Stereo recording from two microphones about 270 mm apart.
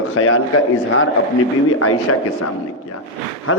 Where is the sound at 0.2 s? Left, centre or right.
Left.